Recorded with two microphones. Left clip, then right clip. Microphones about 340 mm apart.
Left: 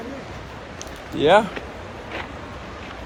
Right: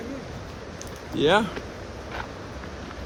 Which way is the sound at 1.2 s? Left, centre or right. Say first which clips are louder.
Left 5 dB; centre.